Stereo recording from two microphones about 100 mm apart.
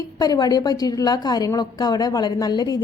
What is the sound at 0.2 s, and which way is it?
A woman's voice, 40° left (ahead or behind).